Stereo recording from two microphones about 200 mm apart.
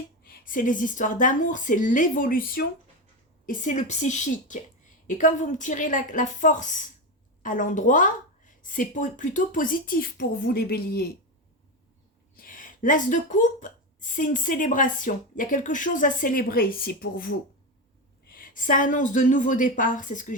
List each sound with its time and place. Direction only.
0.2 s speech: 45° left (ahead or behind)
12.4 s speech: 45° left (ahead or behind)